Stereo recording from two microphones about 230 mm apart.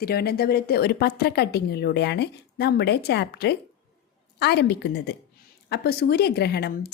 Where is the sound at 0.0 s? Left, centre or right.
Left.